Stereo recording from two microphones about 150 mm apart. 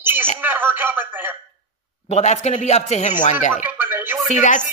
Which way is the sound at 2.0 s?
50° left (ahead or behind).